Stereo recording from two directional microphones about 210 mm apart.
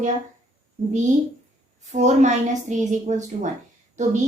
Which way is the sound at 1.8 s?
35° right (ahead or behind).